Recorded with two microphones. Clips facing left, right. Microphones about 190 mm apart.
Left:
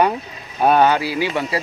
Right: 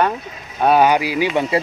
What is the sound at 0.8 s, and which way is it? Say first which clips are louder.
Speech: right 1 dB; 15° right (ahead or behind).